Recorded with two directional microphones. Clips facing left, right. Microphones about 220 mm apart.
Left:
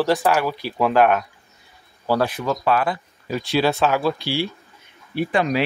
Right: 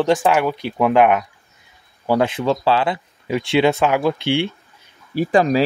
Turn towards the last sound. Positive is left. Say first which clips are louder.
# right 5 dB
turn(degrees=-40)  # may be behind; listen again after turning